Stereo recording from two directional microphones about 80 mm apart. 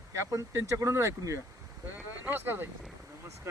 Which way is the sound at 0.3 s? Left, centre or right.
Right.